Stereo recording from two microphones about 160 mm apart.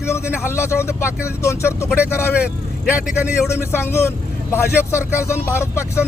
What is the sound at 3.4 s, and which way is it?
Speech, 15° left (ahead or behind).